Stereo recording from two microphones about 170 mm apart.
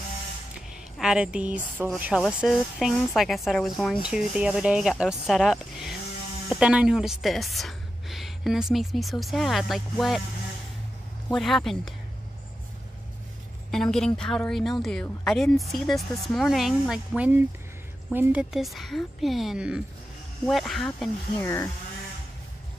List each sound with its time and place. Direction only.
0.9 s a woman's voice: 5° right (ahead or behind)
11.3 s speech: centre (ahead or behind)
13.7 s speech: 5° left (ahead or behind)
21.4 s speech: 15° left (ahead or behind)